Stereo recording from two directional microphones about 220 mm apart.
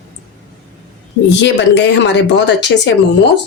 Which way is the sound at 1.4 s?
55° left (ahead or behind).